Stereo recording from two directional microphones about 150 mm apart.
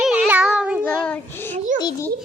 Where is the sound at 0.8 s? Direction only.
5° left (ahead or behind).